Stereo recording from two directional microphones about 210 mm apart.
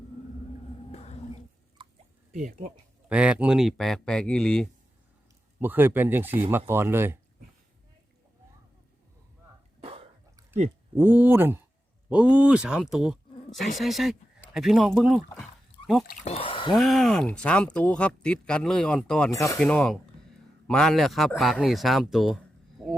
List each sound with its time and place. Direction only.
0.9 s a sound: 30° left (ahead or behind)
1.8 s a sound: 20° right (ahead or behind)
3.1 s speech: 5° right (ahead or behind)
5.5 s speech: 10° right (ahead or behind)
9.8 s cough: 25° right (ahead or behind)
10.9 s a man's voice: 10° right (ahead or behind)
16.2 s speech: 30° left (ahead or behind)
16.7 s speech: centre (ahead or behind)
19.3 s speech: 15° left (ahead or behind)
19.5 s speech: 5° left (ahead or behind)
22.8 s a sound: centre (ahead or behind)